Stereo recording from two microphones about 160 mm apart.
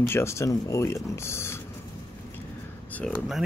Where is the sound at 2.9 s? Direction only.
10° left (ahead or behind).